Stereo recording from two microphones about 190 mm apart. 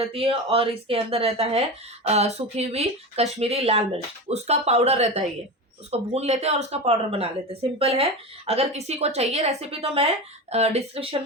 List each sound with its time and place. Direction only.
0.0 s speech: 30° right (ahead or behind)